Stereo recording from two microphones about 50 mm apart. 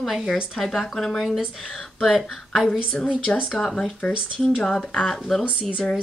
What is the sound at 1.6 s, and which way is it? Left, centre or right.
Speech, centre.